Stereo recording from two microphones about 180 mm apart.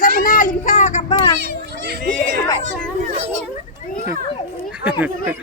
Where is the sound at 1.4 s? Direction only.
60° right (ahead or behind).